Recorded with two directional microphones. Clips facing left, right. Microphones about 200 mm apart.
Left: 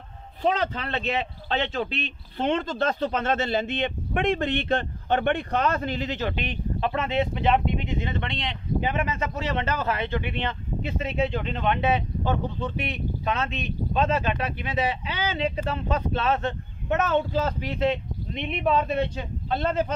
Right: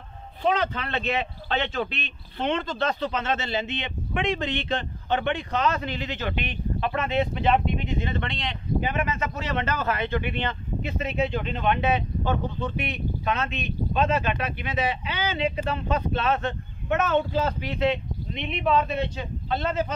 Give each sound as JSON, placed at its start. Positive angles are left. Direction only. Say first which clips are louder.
{"t": 0.4, "sound": "speech", "louder": "even", "side_deg": 35}
{"t": 12.7, "sound": "speech", "louder": "even", "side_deg": 30}